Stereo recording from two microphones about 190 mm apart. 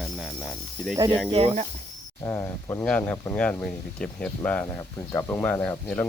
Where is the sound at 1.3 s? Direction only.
35° right (ahead or behind).